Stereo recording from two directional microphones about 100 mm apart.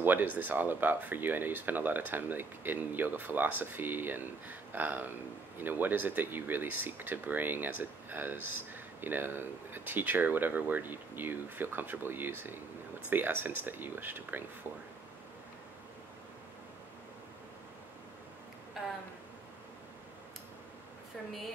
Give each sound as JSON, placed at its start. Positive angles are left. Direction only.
{"t": 0.0, "sound": "speech", "side_deg": -20}